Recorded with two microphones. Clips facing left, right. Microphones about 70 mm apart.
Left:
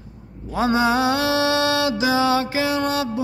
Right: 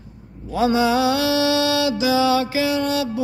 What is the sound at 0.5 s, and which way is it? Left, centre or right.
Mantra, left.